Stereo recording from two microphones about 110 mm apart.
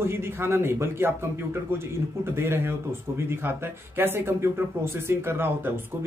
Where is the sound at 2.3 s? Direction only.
20° right (ahead or behind).